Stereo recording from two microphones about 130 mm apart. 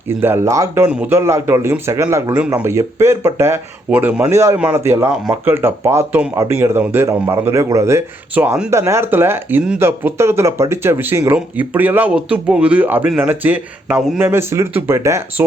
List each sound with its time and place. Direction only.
0.2 s speech: 20° right (ahead or behind)
0.9 s speech: 10° right (ahead or behind)
8.4 s speech: 5° right (ahead or behind)
8.7 s speech: 20° right (ahead or behind)